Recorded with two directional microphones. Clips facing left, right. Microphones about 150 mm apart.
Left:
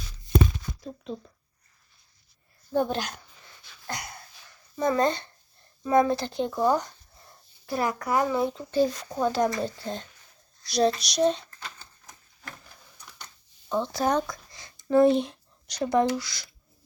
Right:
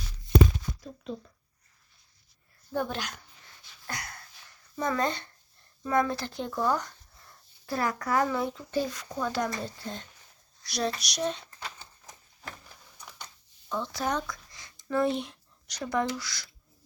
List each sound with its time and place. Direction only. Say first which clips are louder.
2.7 s speech: left 6 dB; 25° left (ahead or behind)
3.8 s a sound: left 3 dB; 20° left (ahead or behind)
4.8 s speech: left 5 dB; 30° left (ahead or behind)
13.7 s speech: left 6 dB; 30° left (ahead or behind)